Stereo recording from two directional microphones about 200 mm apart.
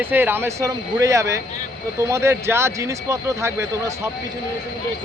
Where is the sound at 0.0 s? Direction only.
10° right (ahead or behind).